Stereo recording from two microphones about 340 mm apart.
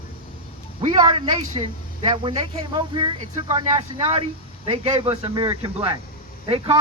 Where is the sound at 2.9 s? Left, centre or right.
Centre.